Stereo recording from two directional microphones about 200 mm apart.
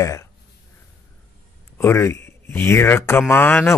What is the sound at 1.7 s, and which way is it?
Speech, 10° left (ahead or behind).